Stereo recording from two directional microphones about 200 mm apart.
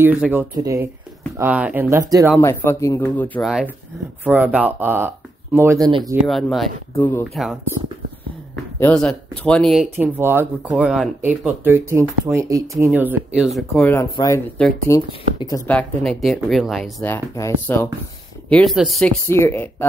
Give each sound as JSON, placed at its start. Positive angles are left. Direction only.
{"t": 0.0, "sound": "speech", "side_deg": -10}
{"t": 2.4, "sound": "speech", "side_deg": 15}
{"t": 3.4, "sound": "speech", "side_deg": 0}
{"t": 5.9, "sound": "speech", "side_deg": -25}
{"t": 6.2, "sound": "speech", "side_deg": 0}
{"t": 8.7, "sound": "speech", "side_deg": 5}
{"t": 9.8, "sound": "speech", "side_deg": -10}
{"t": 14.1, "sound": "speech", "side_deg": 15}
{"t": 15.6, "sound": "speech", "side_deg": 5}
{"t": 17.0, "sound": "speech", "side_deg": 15}
{"t": 18.5, "sound": "speech", "side_deg": 0}